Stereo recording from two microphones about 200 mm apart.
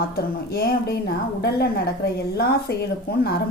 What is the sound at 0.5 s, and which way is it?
A woman's voice, 50° left (ahead or behind).